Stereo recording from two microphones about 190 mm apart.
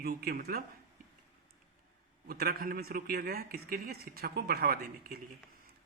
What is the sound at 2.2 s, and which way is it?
Speech, 50° right (ahead or behind).